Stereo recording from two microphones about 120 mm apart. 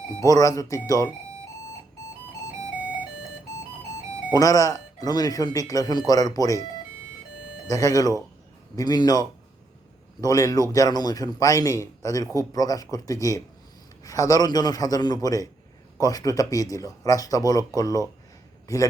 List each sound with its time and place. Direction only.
0.2 s speech: 30° left (ahead or behind)
4.3 s speech: 30° left (ahead or behind)
7.7 s speech: 25° left (ahead or behind)